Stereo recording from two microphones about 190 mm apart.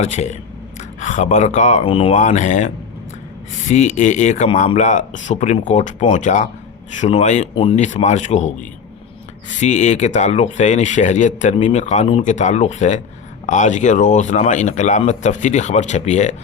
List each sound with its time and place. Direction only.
0.0 s speech: 35° left (ahead or behind)